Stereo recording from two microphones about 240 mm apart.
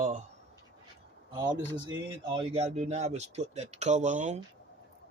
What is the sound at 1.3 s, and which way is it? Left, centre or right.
Speech, centre.